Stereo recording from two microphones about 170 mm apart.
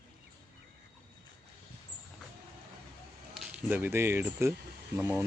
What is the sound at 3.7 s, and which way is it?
Speech, 15° right (ahead or behind).